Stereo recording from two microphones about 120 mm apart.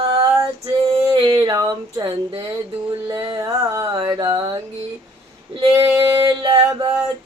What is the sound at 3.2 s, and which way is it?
Music, 40° right (ahead or behind).